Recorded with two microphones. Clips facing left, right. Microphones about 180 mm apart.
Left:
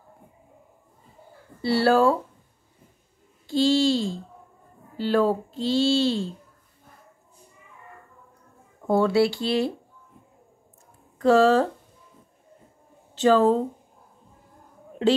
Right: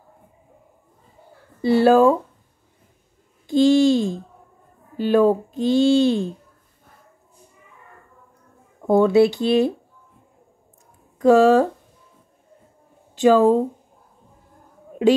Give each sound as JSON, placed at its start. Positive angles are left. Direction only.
{"t": 1.6, "sound": "a child's voice", "side_deg": -15}
{"t": 3.4, "sound": "a child's voice", "side_deg": -20}
{"t": 8.8, "sound": "speech", "side_deg": -20}
{"t": 11.1, "sound": "a child's voice", "side_deg": -15}
{"t": 13.1, "sound": "speech", "side_deg": -15}